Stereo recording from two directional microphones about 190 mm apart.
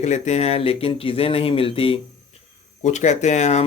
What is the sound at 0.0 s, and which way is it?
Speech, 35° left (ahead or behind).